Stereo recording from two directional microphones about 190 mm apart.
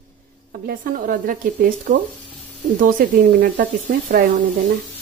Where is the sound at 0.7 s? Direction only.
45° right (ahead or behind).